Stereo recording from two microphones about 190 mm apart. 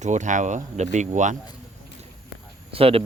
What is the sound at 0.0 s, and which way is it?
Speech, 40° right (ahead or behind).